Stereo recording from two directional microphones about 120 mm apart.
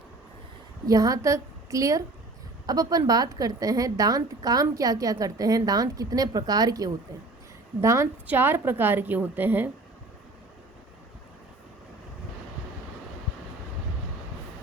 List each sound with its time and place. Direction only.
0.9 s a woman's voice: 30° right (ahead or behind)